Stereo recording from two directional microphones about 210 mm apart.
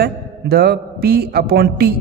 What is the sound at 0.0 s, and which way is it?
A man's voice, 50° right (ahead or behind).